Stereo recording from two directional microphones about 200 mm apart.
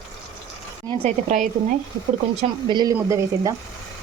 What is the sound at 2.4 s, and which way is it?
A woman's voice, 25° right (ahead or behind).